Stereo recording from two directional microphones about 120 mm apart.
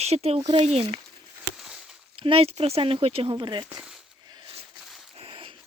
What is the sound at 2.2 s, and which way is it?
Speech, 50° right (ahead or behind).